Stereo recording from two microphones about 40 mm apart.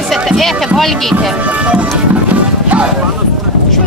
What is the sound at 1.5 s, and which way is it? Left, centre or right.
Speech, right.